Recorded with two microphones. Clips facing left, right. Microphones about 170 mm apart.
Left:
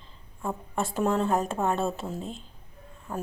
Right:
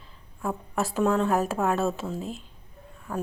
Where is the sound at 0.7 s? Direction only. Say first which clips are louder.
Right 2 dB; centre (ahead or behind).